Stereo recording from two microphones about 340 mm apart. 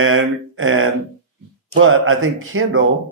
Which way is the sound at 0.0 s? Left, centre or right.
Right.